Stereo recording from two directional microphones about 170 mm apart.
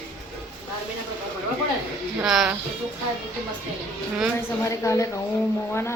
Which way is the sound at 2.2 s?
5° right (ahead or behind).